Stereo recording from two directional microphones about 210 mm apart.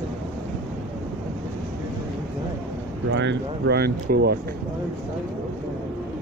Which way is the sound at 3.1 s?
60° right (ahead or behind).